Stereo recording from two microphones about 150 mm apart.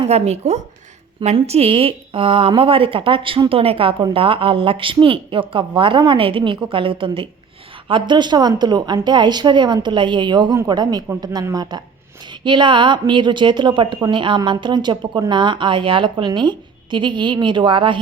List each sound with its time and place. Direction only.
0.0 s a woman's voice: 45° right (ahead or behind)